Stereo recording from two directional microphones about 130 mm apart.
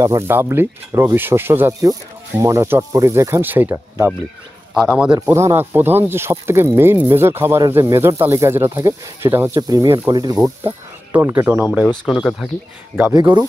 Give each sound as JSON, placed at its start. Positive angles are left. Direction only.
{"t": 0.0, "sound": "speech", "side_deg": -20}
{"t": 4.7, "sound": "speech", "side_deg": -5}
{"t": 5.3, "sound": "speech", "side_deg": -20}
{"t": 9.6, "sound": "speech", "side_deg": -30}
{"t": 11.1, "sound": "speech", "side_deg": -15}
{"t": 11.9, "sound": "speech", "side_deg": 5}
{"t": 13.1, "sound": "speech", "side_deg": -35}